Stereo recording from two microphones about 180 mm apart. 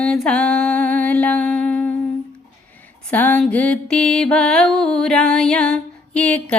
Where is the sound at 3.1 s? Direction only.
10° left (ahead or behind).